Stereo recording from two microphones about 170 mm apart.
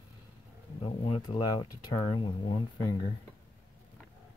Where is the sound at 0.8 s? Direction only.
30° left (ahead or behind).